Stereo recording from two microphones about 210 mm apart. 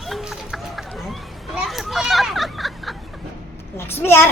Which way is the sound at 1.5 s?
Centre (ahead or behind).